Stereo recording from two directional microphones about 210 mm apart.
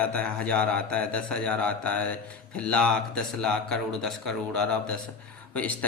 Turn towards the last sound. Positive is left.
turn(degrees=5)  # may be behind; listen again after turning